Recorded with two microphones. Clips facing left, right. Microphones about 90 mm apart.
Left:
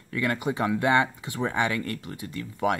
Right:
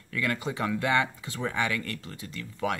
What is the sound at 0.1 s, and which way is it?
Speech, 25° left (ahead or behind).